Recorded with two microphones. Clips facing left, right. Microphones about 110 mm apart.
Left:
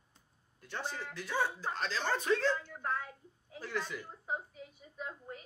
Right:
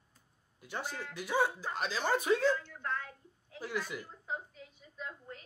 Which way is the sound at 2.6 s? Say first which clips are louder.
Left 1 dB; 35° left (ahead or behind).